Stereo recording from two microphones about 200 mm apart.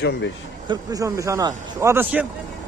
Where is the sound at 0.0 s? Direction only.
60° left (ahead or behind).